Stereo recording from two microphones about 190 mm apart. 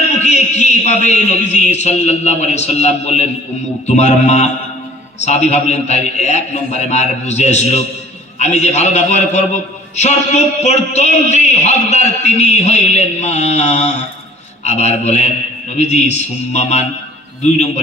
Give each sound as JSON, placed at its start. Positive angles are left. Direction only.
{"t": 0.1, "sound": "a man's voice", "side_deg": 35}